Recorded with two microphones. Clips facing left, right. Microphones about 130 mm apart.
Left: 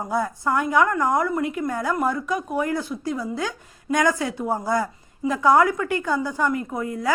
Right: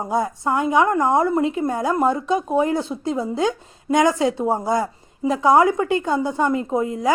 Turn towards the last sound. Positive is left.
turn(degrees=-20)  # may be behind; listen again after turning